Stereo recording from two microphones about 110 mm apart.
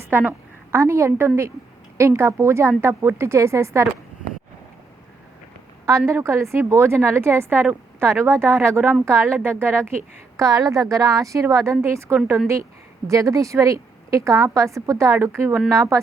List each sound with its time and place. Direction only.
0.1 s a woman's voice: 20° right (ahead or behind)
6.1 s a woman's voice: 25° right (ahead or behind)
10.3 s a woman's voice: 30° right (ahead or behind)